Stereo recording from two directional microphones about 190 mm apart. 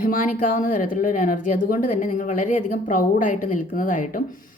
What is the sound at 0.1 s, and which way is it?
Speech, 45° left (ahead or behind).